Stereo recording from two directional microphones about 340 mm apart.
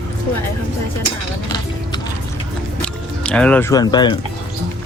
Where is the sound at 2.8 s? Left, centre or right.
Centre.